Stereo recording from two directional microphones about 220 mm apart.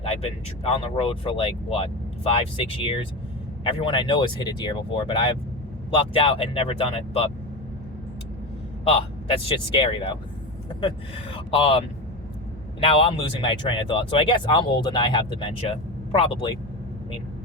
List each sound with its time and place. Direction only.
0.0 s speech: 25° left (ahead or behind)
8.8 s speech: 25° left (ahead or behind)
11.3 s speech: 25° left (ahead or behind)